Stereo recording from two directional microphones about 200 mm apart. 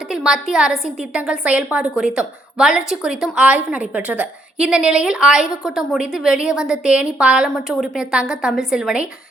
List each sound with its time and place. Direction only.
0.1 s a woman's voice: centre (ahead or behind)